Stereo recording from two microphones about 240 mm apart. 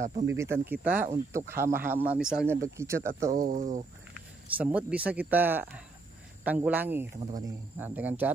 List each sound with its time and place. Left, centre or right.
0.0 s speech: right
0.3 s speech: centre
3.3 s speech: right
4.6 s speech: centre